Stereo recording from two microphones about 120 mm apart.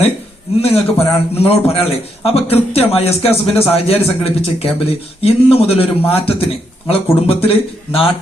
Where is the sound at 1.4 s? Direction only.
55° left (ahead or behind).